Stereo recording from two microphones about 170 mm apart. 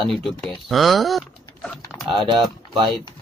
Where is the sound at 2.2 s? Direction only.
30° right (ahead or behind).